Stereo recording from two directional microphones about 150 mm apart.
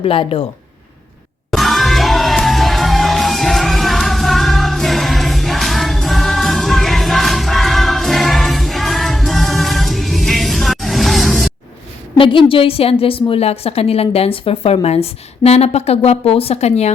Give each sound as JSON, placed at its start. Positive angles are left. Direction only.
{"t": 0.0, "sound": "a woman's voice", "side_deg": 40}
{"t": 1.5, "sound": "music", "side_deg": 0}
{"t": 12.1, "sound": "a woman's voice", "side_deg": 35}